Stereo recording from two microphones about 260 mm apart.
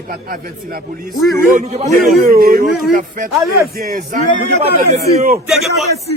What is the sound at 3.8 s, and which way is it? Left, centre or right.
A man's voice, right.